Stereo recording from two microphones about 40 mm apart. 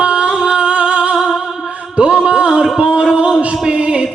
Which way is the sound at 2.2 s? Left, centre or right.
Right.